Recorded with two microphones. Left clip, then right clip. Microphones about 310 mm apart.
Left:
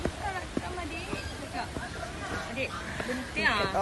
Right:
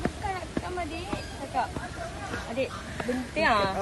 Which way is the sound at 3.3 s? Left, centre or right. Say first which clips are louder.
Right 4 dB; centre.